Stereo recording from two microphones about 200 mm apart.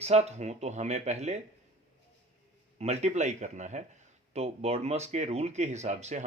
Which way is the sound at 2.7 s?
35° right (ahead or behind).